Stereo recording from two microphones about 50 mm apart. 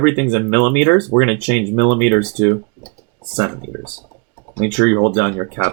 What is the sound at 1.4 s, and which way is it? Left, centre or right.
Speech, left.